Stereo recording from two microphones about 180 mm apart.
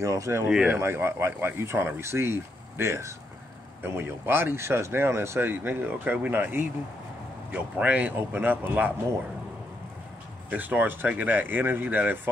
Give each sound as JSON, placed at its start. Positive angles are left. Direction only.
{"t": 0.0, "sound": "speech", "side_deg": -15}
{"t": 10.5, "sound": "speech", "side_deg": -10}